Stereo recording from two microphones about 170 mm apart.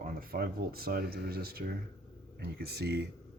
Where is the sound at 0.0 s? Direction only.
60° right (ahead or behind).